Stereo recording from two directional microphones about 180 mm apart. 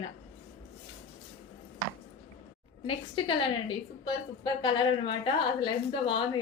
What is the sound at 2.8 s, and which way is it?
A woman's voice, 30° left (ahead or behind).